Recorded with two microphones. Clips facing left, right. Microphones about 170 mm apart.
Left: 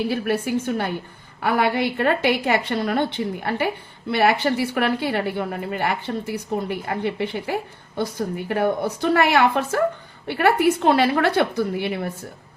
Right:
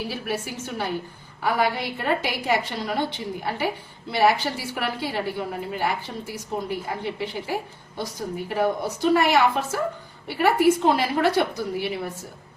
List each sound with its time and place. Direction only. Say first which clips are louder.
0.4 s a woman's voice: left 7 dB; 55° left (ahead or behind)